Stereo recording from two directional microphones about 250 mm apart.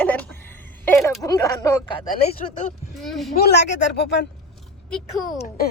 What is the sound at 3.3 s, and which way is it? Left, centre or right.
Speech, left.